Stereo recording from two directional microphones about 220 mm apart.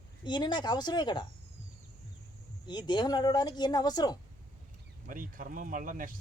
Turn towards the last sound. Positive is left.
turn(degrees=-40)  # may be behind; listen again after turning